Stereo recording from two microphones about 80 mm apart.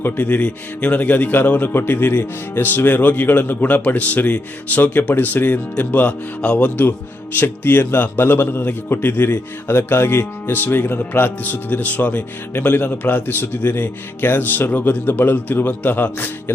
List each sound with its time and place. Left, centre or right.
0.0 s a man's voice: left